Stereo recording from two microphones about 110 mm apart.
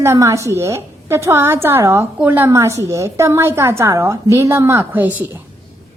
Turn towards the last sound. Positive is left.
turn(degrees=-20)  # may be behind; listen again after turning